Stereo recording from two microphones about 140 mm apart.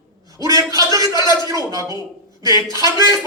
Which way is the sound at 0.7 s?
25° right (ahead or behind).